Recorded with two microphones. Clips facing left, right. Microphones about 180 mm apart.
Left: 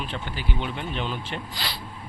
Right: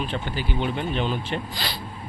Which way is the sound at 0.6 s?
45° right (ahead or behind).